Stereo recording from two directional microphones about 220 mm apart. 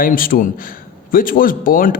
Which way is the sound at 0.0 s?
40° left (ahead or behind).